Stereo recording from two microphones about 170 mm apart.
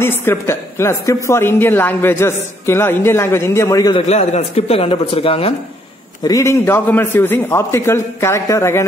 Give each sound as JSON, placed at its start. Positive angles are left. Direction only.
{"t": 0.0, "sound": "a woman's voice", "side_deg": 15}
{"t": 4.1, "sound": "speech", "side_deg": 40}
{"t": 6.2, "sound": "a woman's voice", "side_deg": 15}